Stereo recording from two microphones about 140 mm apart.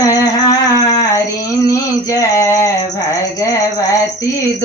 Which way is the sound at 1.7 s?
20° left (ahead or behind).